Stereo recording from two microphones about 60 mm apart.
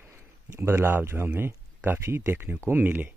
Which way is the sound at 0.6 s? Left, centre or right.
Right.